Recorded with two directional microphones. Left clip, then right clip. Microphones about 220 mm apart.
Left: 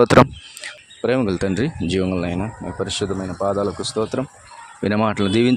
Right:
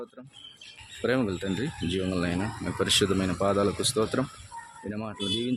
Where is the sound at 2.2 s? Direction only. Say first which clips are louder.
Left 5 dB; 20° left (ahead or behind).